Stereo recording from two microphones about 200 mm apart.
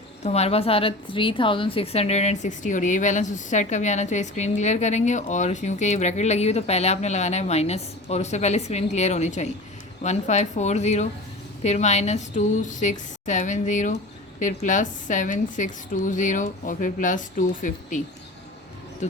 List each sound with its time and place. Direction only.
0.2 s a woman's voice: 35° left (ahead or behind)